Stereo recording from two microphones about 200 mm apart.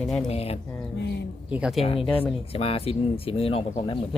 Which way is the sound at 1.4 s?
5° right (ahead or behind).